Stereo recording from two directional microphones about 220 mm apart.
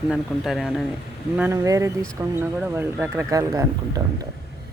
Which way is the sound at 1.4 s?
15° right (ahead or behind).